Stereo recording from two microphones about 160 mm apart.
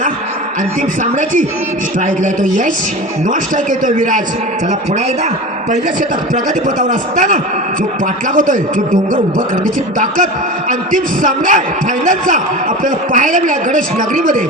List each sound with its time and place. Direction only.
2.0 s a man's voice: 55° right (ahead or behind)
5.7 s a man's voice: 55° right (ahead or behind)
8.4 s a man's voice: 55° right (ahead or behind)
9.6 s a man's voice: 60° right (ahead or behind)